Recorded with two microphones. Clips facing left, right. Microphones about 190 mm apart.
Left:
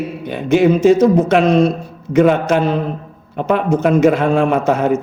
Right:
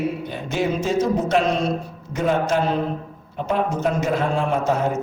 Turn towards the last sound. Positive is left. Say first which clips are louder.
# left 6 dB
turn(degrees=70)  # may be behind; listen again after turning